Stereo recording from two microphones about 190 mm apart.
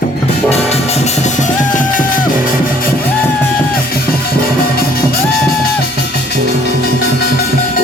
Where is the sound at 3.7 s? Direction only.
50° left (ahead or behind).